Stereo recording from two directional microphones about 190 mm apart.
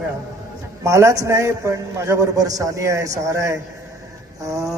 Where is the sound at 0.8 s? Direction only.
15° right (ahead or behind).